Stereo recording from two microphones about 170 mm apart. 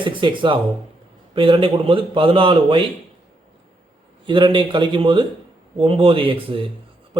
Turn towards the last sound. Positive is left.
turn(degrees=-30)  # may be behind; listen again after turning